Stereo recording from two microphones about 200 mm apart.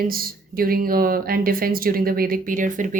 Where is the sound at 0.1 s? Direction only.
45° right (ahead or behind).